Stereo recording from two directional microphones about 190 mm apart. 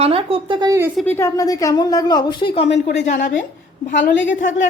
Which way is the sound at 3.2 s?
45° left (ahead or behind).